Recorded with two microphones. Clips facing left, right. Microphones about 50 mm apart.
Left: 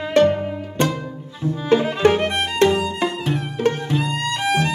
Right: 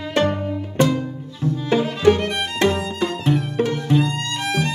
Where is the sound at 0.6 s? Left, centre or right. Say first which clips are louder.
Right 3 dB; left.